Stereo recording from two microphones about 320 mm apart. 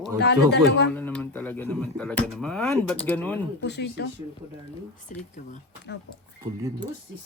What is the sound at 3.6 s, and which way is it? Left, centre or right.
Speech, left.